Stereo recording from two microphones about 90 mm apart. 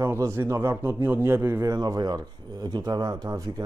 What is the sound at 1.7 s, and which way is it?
Speech, 45° right (ahead or behind).